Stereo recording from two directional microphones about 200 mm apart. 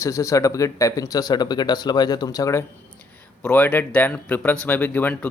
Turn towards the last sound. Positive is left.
turn(degrees=10)  # may be behind; listen again after turning